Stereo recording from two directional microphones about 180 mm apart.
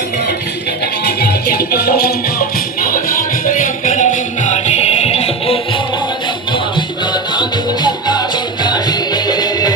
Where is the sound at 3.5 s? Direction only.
45° left (ahead or behind).